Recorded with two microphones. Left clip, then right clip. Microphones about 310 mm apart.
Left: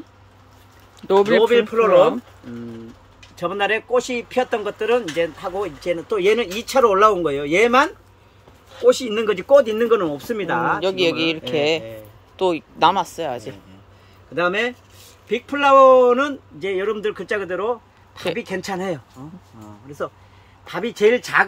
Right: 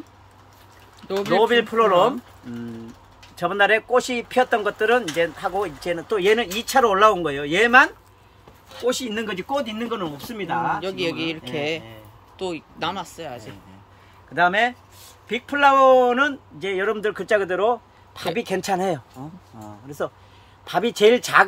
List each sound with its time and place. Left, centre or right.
1.0 s speech: centre
1.5 s speech: centre
3.3 s speech: centre
9.5 s speech: centre
14.3 s speech: centre; by 19.3 s right
20.6 s speech: right